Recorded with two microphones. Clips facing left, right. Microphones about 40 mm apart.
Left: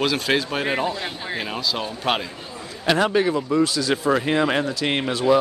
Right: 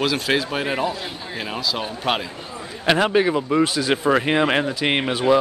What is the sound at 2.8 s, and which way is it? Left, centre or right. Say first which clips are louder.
Speech: right 1 dB; centre.